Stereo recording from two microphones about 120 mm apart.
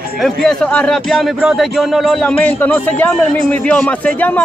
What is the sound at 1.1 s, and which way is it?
Speech, 5° right (ahead or behind).